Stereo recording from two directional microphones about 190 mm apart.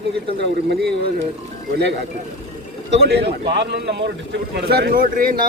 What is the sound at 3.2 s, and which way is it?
Speech, 65° right (ahead or behind).